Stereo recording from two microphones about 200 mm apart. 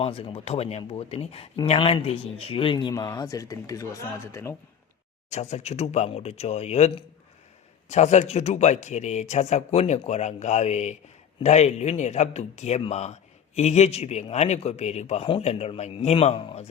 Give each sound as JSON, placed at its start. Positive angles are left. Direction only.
{"t": 0.0, "sound": "speech", "side_deg": 30}
{"t": 5.3, "sound": "a man's voice", "side_deg": 35}